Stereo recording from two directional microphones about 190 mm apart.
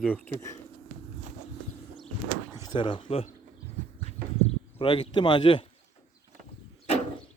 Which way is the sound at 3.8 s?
40° right (ahead or behind).